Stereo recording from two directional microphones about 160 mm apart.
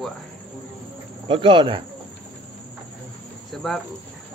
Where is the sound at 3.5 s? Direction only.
Centre (ahead or behind).